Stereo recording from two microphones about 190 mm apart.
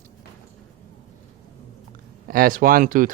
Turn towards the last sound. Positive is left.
turn(degrees=-45)  # may be behind; listen again after turning